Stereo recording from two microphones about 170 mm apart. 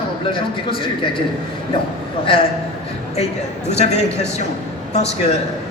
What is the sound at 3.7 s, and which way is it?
A man's voice, 40° left (ahead or behind).